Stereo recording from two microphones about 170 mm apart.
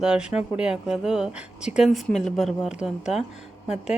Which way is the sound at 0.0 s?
5° right (ahead or behind).